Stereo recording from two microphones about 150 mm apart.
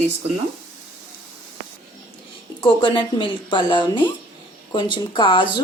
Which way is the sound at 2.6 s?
30° left (ahead or behind).